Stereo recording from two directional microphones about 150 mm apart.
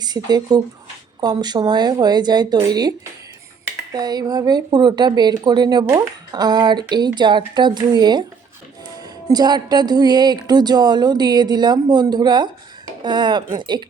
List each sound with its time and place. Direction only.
0.0 s speech: 25° right (ahead or behind)
9.3 s speech: 25° right (ahead or behind)